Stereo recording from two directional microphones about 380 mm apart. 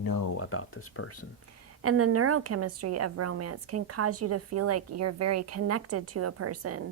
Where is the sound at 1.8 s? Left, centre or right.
Right.